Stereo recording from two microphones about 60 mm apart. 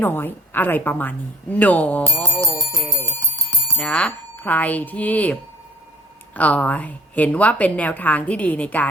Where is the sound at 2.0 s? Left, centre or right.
Right.